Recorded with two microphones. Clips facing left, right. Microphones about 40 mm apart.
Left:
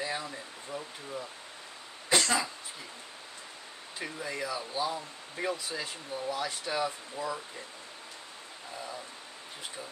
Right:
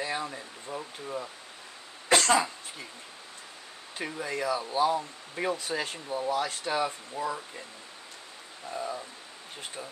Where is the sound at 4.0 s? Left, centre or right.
Right.